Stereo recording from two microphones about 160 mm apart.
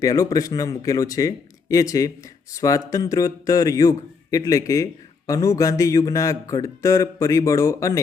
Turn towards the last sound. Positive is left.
turn(degrees=20)  # may be behind; listen again after turning